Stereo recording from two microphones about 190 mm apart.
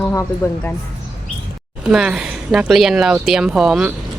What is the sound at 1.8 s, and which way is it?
Speech, 5° right (ahead or behind).